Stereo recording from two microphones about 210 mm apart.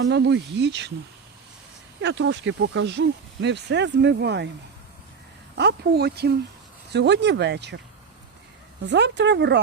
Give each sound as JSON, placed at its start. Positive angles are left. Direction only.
{"t": 0.0, "sound": "speech", "side_deg": -55}
{"t": 2.0, "sound": "speech", "side_deg": -60}
{"t": 5.5, "sound": "speech", "side_deg": -50}
{"t": 8.9, "sound": "speech", "side_deg": -55}